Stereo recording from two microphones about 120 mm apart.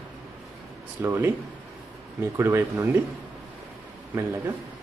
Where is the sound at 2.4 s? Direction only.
25° right (ahead or behind).